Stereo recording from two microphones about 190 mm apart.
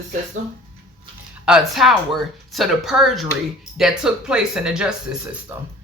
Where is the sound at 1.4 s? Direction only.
5° right (ahead or behind).